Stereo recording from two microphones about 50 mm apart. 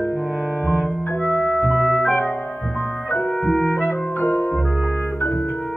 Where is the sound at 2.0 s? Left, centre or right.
Left.